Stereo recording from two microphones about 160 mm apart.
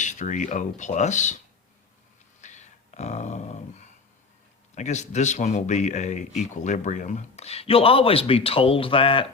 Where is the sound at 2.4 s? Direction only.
50° left (ahead or behind).